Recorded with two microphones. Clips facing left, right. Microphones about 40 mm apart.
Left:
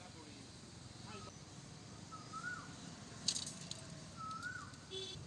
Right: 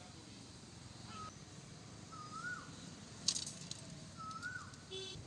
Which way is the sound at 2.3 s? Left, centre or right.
Left.